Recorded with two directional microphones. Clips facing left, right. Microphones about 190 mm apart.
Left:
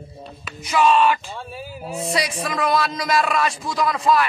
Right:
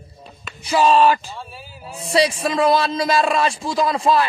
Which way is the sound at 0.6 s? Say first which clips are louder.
Right 2 dB; 30° right (ahead or behind).